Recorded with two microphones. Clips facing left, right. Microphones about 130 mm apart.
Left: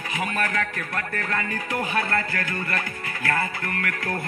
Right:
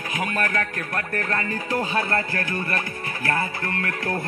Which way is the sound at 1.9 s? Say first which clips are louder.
Right 1 dB; 20° right (ahead or behind).